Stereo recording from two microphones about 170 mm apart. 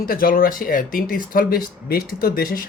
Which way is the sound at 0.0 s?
60° left (ahead or behind).